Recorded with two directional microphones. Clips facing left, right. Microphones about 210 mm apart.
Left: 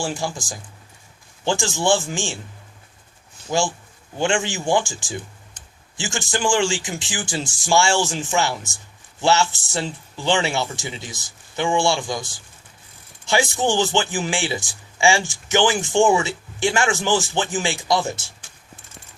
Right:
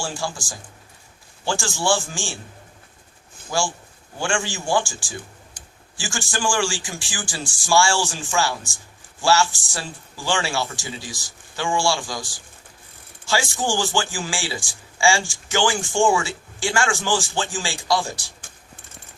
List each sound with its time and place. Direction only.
0.0 s a man's voice: 20° left (ahead or behind)
3.5 s a man's voice: 20° left (ahead or behind)